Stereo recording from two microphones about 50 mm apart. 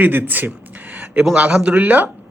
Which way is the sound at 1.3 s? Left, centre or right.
Right.